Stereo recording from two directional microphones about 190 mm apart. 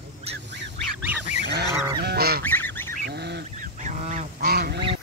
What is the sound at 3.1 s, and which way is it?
Duck, 60° right (ahead or behind).